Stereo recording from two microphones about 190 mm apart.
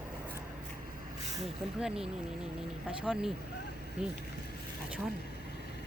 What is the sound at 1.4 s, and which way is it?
Speech, centre (ahead or behind).